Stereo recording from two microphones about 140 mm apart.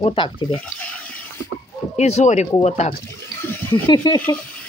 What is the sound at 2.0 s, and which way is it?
Speech, 55° left (ahead or behind).